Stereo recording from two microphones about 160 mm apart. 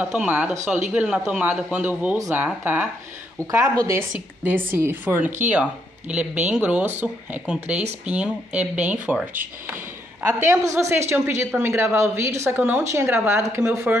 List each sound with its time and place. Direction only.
0.0 s a woman's voice: 10° right (ahead or behind)
2.1 s a woman's voice: 20° right (ahead or behind)
10.2 s a woman's voice: 15° right (ahead or behind)